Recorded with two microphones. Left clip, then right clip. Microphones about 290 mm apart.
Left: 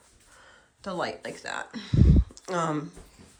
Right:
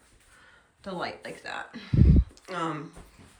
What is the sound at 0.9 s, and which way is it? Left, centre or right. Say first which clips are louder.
Speech: left 3 dB; centre.